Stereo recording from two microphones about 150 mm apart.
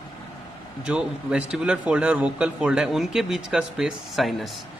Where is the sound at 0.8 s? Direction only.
5° right (ahead or behind).